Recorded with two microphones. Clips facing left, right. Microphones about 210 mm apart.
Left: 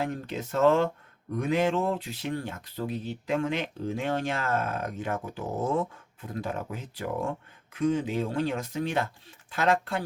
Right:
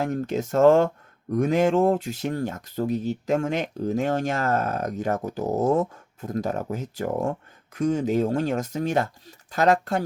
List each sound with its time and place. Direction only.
0.0 s speech: 45° right (ahead or behind)